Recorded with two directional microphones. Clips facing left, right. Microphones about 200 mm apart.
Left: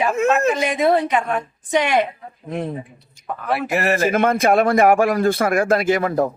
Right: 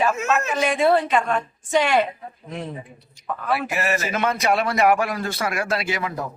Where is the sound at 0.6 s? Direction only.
20° left (ahead or behind).